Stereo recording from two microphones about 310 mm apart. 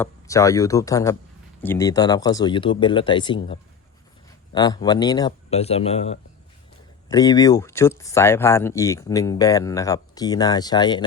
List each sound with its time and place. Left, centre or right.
0.0 s speech: centre